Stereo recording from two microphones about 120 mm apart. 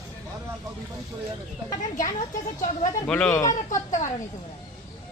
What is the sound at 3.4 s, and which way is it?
Speech, 90° left.